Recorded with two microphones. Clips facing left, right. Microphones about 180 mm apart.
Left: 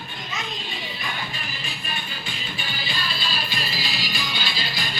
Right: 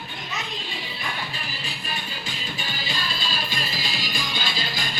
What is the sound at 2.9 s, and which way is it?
Music, 45° right (ahead or behind).